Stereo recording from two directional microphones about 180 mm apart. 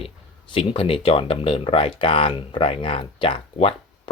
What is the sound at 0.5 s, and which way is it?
Speech, 30° left (ahead or behind).